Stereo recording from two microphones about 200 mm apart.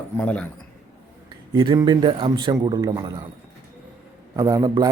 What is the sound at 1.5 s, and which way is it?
Speech, 25° right (ahead or behind).